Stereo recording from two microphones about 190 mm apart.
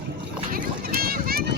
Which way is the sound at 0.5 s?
50° right (ahead or behind).